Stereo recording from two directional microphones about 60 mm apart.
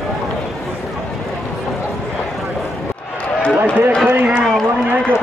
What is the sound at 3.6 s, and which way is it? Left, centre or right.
Run, right.